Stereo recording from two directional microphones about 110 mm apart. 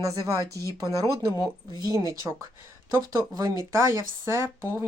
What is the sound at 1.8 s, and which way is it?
Speech, 30° right (ahead or behind).